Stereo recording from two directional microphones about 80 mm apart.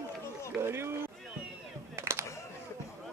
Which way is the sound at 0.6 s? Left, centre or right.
Right.